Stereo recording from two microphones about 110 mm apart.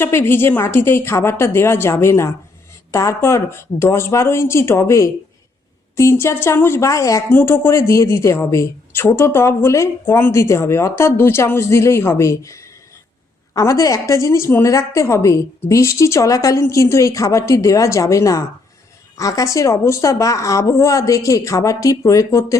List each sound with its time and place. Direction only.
0.0 s speech: 20° left (ahead or behind)